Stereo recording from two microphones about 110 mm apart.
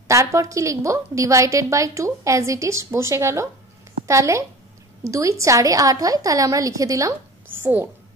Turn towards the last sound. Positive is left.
turn(degrees=-20)  # may be behind; listen again after turning